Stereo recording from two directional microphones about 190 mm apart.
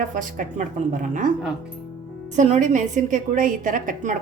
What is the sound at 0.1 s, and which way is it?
A woman's voice, 45° right (ahead or behind).